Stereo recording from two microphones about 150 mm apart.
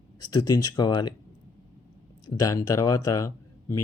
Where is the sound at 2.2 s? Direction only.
20° left (ahead or behind).